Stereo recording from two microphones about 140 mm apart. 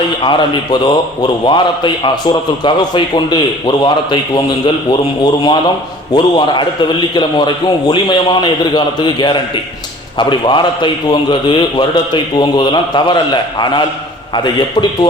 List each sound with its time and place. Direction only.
0.2 s a man's voice: 35° left (ahead or behind)